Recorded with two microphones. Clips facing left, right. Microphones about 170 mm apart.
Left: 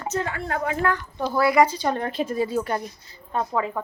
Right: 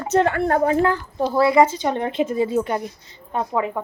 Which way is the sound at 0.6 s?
30° right (ahead or behind).